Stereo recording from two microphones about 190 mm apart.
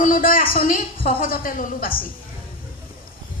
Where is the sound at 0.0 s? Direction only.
45° left (ahead or behind).